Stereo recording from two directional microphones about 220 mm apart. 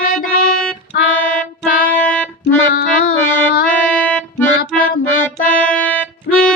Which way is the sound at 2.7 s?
40° left (ahead or behind).